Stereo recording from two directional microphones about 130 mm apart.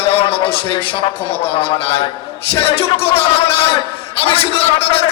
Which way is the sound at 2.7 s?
45° left (ahead or behind).